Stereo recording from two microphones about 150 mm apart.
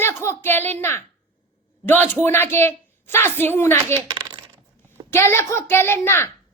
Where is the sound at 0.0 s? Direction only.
15° left (ahead or behind).